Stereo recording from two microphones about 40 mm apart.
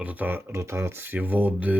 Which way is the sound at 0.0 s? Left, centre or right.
Right.